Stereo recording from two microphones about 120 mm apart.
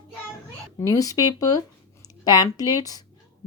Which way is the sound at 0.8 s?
25° left (ahead or behind).